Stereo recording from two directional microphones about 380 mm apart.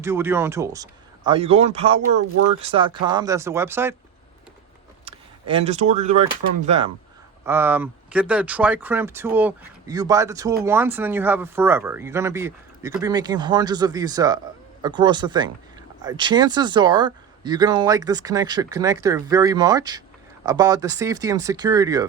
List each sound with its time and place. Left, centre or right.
0.0 s speech: centre
5.0 s speech: centre